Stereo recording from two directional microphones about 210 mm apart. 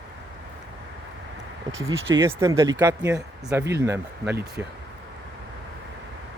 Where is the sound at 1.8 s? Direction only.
10° right (ahead or behind).